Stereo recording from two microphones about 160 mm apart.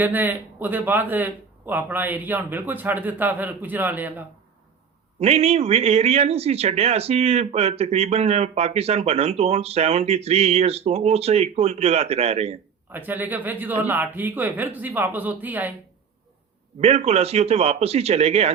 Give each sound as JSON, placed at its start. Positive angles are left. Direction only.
{"t": 0.0, "sound": "speech", "side_deg": -10}
{"t": 5.2, "sound": "a man's voice", "side_deg": -40}
{"t": 12.9, "sound": "speech", "side_deg": -10}
{"t": 16.8, "sound": "a man's voice", "side_deg": -40}